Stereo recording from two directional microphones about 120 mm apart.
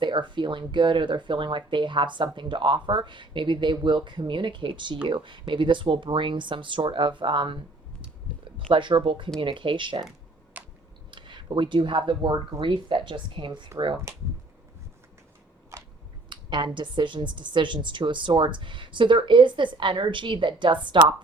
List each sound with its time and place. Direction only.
0.0 s speech: 40° right (ahead or behind)
8.7 s speech: 40° right (ahead or behind)
10.5 s chewing: 15° right (ahead or behind)
11.1 s speech: 40° right (ahead or behind)
16.3 s speech: 40° right (ahead or behind)